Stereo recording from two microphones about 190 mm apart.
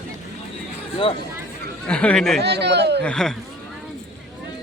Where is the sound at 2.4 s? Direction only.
60° right (ahead or behind).